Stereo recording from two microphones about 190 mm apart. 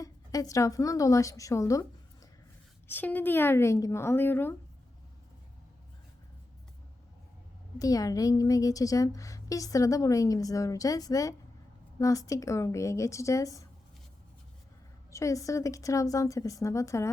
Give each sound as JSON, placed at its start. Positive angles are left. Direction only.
{"t": 0.0, "sound": "a woman's voice", "side_deg": 20}
{"t": 7.8, "sound": "a woman's voice", "side_deg": 20}
{"t": 15.1, "sound": "a woman's voice", "side_deg": 15}